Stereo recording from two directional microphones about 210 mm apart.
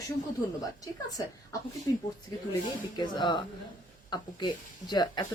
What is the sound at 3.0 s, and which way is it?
Speech, 20° left (ahead or behind).